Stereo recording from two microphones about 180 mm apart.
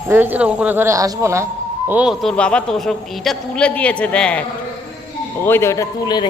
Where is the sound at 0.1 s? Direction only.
10° right (ahead or behind).